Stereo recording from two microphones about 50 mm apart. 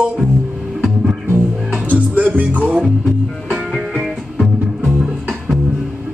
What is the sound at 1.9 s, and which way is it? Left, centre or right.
Music, right.